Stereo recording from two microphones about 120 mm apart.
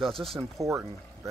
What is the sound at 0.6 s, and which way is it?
Speech, 25° right (ahead or behind).